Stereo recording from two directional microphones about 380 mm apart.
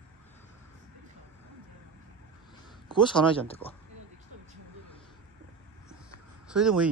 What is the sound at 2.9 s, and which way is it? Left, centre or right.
Speech, centre.